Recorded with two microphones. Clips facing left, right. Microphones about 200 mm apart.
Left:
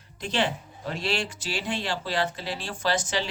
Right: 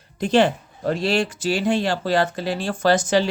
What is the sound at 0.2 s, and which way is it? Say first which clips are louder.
A man's voice: right 10 dB; 45° right (ahead or behind).